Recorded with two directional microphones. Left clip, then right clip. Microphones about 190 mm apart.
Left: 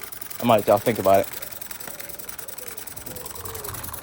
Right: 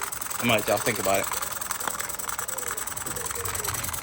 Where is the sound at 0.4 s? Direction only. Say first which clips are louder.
Left 6 dB; 25° left (ahead or behind).